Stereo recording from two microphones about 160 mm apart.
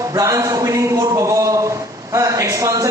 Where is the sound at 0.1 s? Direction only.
20° right (ahead or behind).